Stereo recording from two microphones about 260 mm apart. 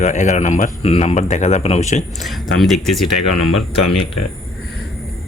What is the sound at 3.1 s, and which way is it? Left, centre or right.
Speech, left.